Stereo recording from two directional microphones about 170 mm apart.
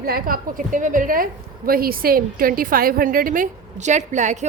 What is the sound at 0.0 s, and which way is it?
A woman's voice, 60° right (ahead or behind).